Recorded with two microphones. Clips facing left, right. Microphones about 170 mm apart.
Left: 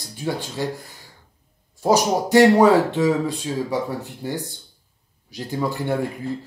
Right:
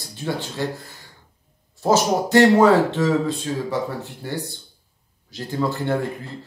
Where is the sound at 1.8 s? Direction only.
15° left (ahead or behind).